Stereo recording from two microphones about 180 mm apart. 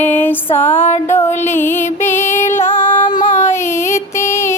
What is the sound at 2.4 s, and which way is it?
Music, 45° left (ahead or behind).